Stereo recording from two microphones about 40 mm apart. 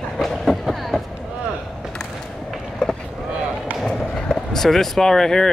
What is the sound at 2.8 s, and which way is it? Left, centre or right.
Boat, centre.